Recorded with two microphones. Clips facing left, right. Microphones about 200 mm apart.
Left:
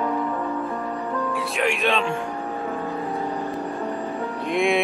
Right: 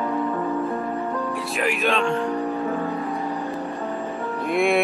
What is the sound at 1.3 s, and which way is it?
Music, centre (ahead or behind).